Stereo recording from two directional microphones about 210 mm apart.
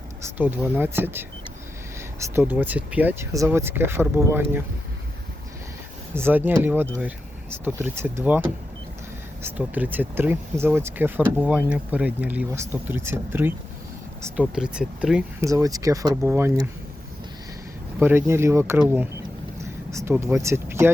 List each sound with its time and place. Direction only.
0.3 s speech: 10° right (ahead or behind)
6.1 s speech: 10° right (ahead or behind)
15.4 s speech: 15° right (ahead or behind)
18.0 s speech: 10° right (ahead or behind)